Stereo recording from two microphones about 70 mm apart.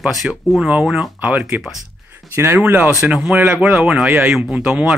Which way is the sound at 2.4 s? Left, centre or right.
Right.